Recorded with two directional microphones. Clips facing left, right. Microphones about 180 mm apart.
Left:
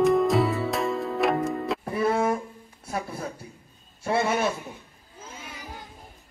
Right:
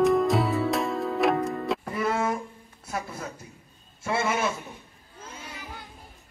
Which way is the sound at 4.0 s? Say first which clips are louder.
Left 2 dB; 40° left (ahead or behind).